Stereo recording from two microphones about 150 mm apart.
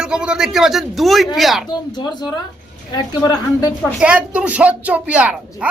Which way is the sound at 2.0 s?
30° left (ahead or behind).